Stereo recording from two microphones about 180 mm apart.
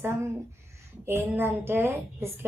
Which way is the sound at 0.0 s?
15° right (ahead or behind).